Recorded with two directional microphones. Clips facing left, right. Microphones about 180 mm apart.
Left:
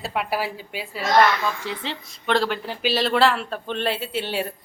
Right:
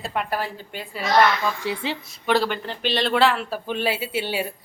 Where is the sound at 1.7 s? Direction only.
5° right (ahead or behind).